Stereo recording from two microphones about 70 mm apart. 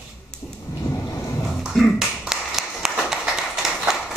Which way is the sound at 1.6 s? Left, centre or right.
Centre.